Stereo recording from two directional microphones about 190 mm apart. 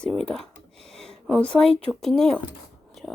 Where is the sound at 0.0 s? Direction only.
5° left (ahead or behind).